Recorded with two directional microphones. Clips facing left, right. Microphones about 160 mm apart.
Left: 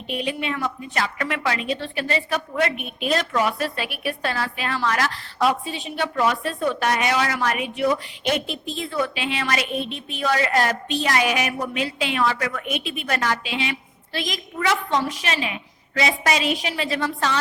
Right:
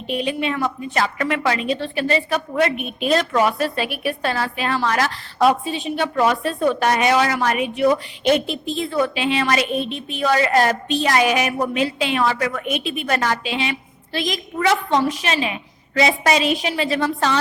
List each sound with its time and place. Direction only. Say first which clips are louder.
0.1 s a woman's voice: right 4 dB; 30° right (ahead or behind)
5.6 s a woman's voice: right 4 dB; 25° right (ahead or behind)